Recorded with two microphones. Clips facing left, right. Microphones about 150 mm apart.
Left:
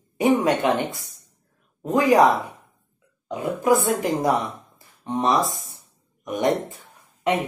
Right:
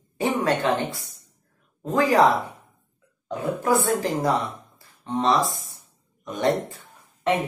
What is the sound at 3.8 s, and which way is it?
Speech, 20° left (ahead or behind).